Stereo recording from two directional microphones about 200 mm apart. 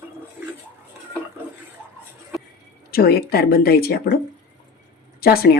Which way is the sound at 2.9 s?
50° left (ahead or behind).